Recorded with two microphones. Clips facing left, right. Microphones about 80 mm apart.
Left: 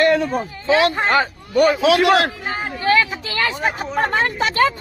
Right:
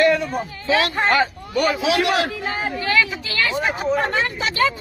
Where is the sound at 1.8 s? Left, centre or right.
Left.